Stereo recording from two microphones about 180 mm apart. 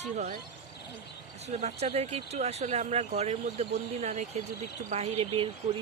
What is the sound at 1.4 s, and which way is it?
Speech, 35° right (ahead or behind).